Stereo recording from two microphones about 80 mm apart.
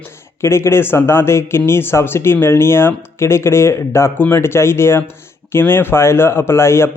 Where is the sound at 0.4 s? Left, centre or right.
Left.